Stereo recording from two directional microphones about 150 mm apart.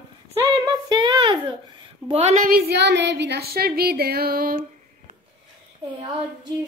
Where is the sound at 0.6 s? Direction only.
25° right (ahead or behind).